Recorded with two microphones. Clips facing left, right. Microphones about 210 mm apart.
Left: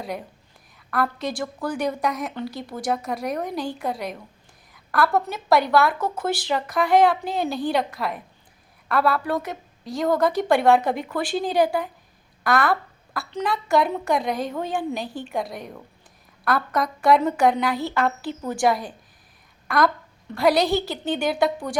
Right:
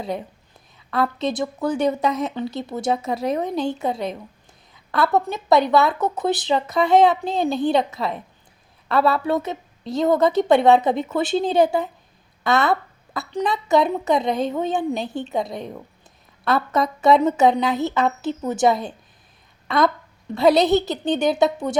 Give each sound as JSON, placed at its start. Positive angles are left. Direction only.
{"t": 0.9, "sound": "a woman's voice", "side_deg": -20}